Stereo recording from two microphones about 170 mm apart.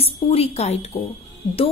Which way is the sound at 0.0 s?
35° left (ahead or behind).